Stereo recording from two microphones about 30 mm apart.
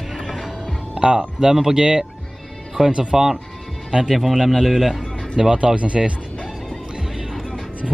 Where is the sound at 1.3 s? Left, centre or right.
Centre.